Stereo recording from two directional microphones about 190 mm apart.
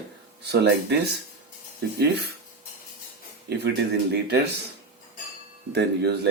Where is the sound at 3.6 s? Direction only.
65° right (ahead or behind).